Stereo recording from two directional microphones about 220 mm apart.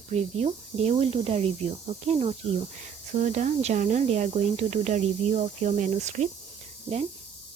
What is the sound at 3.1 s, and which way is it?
Speech, 35° right (ahead or behind).